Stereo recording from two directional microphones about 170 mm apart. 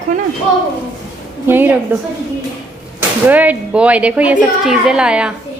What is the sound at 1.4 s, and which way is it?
Speech, 10° right (ahead or behind).